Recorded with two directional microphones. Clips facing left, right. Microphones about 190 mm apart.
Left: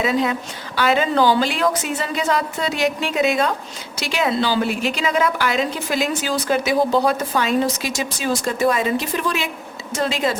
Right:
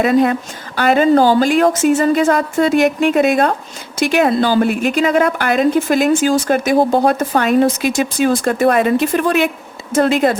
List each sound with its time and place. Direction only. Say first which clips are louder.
0.0 s a woman's voice: right 7 dB; 55° right (ahead or behind)